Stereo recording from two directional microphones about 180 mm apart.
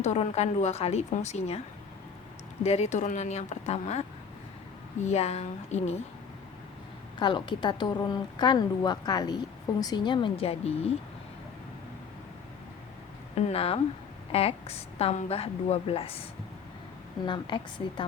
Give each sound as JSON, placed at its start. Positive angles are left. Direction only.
{"t": 0.0, "sound": "a woman's voice", "side_deg": 40}
{"t": 2.6, "sound": "a woman's voice", "side_deg": 40}
{"t": 5.0, "sound": "a woman's voice", "side_deg": 35}
{"t": 7.2, "sound": "a woman's voice", "side_deg": 25}
{"t": 13.3, "sound": "a woman's voice", "side_deg": 35}
{"t": 17.2, "sound": "a woman's voice", "side_deg": 25}